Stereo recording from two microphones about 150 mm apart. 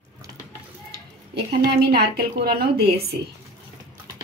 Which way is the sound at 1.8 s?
90° right.